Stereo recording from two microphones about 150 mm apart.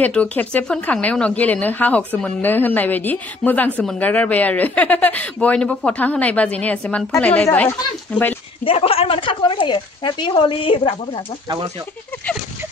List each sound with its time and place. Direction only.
0.0 s speech: 10° left (ahead or behind)
8.6 s speech: 40° left (ahead or behind)